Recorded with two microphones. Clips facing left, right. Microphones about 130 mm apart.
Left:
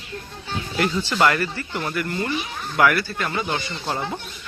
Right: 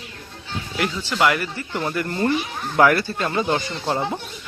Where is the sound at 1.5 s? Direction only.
20° right (ahead or behind).